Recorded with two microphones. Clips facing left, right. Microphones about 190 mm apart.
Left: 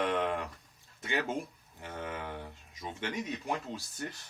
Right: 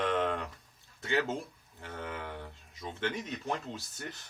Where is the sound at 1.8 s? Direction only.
15° left (ahead or behind).